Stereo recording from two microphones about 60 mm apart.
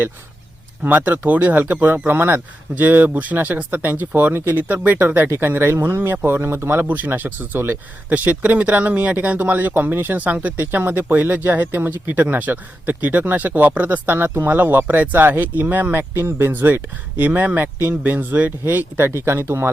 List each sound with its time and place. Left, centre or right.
0.8 s speech: right
6.8 s speech: right